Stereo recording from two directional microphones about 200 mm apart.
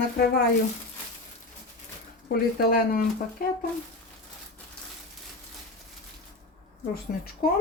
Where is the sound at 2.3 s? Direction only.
50° left (ahead or behind).